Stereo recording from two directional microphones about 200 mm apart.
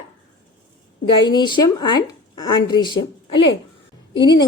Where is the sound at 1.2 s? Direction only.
20° left (ahead or behind).